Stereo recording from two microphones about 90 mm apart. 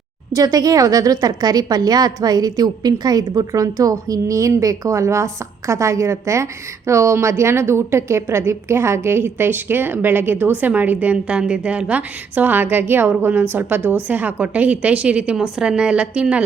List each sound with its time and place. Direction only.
0.3 s a woman's voice: 45° right (ahead or behind); by 16.4 s 10° right (ahead or behind)